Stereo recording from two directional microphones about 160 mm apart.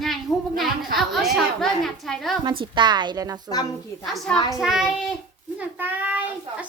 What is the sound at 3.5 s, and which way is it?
Speech, 25° left (ahead or behind).